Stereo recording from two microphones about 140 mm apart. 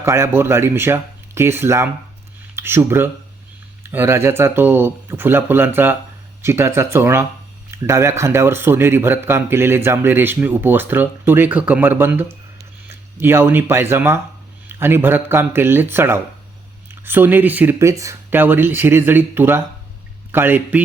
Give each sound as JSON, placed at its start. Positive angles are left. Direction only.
{"t": 0.0, "sound": "speech", "side_deg": -20}
{"t": 12.5, "sound": "a sound", "side_deg": -15}
{"t": 14.7, "sound": "speech", "side_deg": -15}